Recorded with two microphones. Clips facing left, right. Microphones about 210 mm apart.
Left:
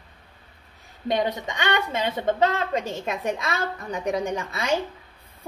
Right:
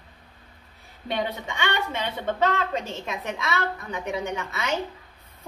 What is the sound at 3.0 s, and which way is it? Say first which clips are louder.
A woman's voice: left 4 dB; 35° left (ahead or behind).